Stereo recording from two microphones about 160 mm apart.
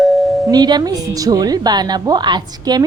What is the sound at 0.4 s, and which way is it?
A woman's voice, 25° right (ahead or behind).